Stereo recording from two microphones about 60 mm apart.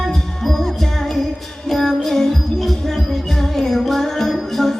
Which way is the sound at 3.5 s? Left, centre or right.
Centre.